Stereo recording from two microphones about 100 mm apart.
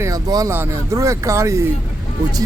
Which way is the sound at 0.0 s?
35° right (ahead or behind).